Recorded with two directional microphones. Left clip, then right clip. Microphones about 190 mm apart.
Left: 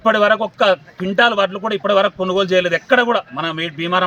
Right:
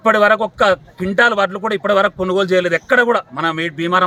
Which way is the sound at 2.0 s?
10° right (ahead or behind).